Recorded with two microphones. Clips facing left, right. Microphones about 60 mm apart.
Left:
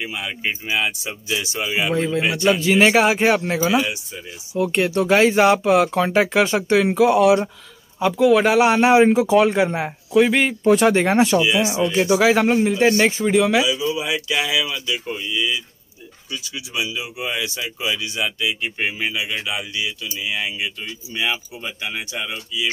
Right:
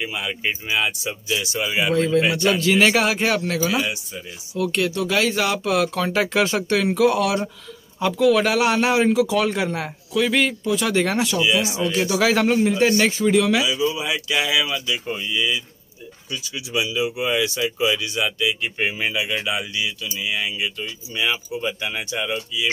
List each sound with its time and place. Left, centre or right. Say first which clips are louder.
0.1 s a man's voice: even; centre; by 6.1 s left
6.1 s a man's voice: left 3 dB; centre
10.6 s a man's voice: left 6 dB; left
11.4 s a man's voice: left 2 dB; centre
13.7 s a man's voice: even; centre